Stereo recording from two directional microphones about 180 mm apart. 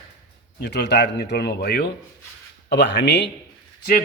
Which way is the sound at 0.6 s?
70° left (ahead or behind).